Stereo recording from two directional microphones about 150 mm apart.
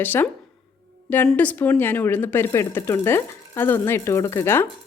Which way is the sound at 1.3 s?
10° left (ahead or behind).